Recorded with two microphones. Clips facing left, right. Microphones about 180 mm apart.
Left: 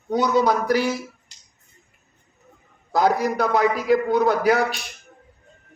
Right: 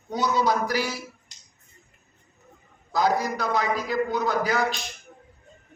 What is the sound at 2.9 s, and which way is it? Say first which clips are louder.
A man's voice: left 4 dB; 60° left (ahead or behind).